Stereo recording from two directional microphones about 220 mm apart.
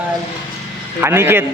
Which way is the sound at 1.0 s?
10° right (ahead or behind).